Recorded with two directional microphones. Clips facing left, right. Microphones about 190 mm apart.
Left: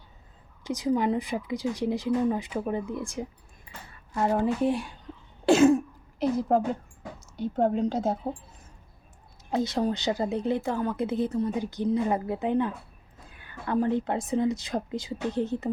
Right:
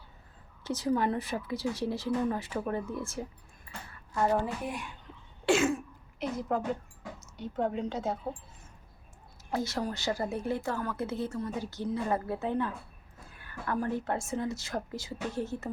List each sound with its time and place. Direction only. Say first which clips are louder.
0.6 s a woman's voice: left 3 dB; 15° left (ahead or behind); by 6.6 s 35° left (ahead or behind)
7.6 s speech: left 6 dB; 40° left (ahead or behind)
9.5 s speech: left 6 dB; 20° left (ahead or behind)